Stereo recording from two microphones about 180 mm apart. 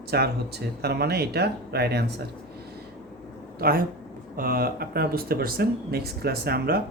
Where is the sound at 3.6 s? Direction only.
55° right (ahead or behind).